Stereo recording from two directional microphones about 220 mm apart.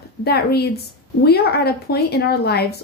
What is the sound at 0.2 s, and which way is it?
A woman's voice, 45° left (ahead or behind).